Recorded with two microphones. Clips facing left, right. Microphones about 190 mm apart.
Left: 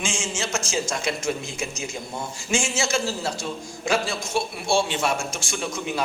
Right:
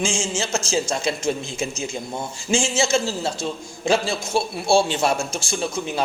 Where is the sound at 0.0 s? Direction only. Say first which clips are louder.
Right 4 dB; 30° right (ahead or behind).